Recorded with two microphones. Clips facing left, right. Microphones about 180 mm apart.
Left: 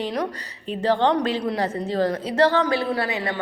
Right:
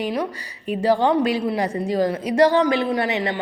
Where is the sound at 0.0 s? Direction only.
5° right (ahead or behind).